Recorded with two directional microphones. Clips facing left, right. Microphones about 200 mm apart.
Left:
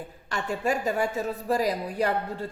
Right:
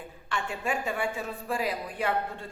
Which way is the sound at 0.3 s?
40° left (ahead or behind).